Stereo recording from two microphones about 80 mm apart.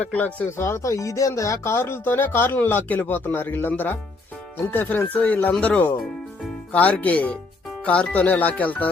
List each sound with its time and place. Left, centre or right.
0.0 s speech: centre
0.5 s speech: left; by 8.9 s centre